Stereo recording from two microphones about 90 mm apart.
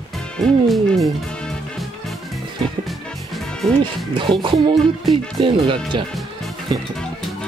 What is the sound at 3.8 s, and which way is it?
Speech, 65° right (ahead or behind).